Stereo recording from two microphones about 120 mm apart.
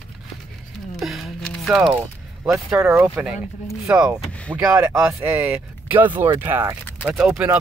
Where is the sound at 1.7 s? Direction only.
5° right (ahead or behind).